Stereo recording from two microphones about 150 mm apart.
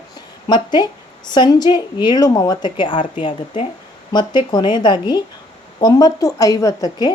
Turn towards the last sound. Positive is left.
turn(degrees=25)  # may be behind; listen again after turning